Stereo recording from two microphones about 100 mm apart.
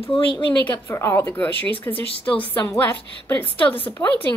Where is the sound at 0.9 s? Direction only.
30° left (ahead or behind).